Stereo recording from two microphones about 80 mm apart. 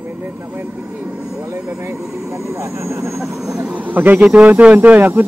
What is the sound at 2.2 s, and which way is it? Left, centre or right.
Speech, right.